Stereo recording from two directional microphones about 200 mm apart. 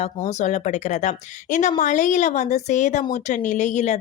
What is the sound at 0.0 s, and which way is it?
Speech, 35° left (ahead or behind).